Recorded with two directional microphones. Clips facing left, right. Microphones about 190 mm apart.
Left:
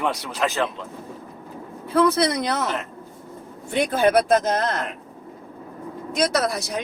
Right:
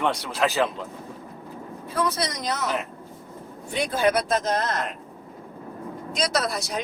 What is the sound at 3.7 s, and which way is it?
Speech, 55° left (ahead or behind).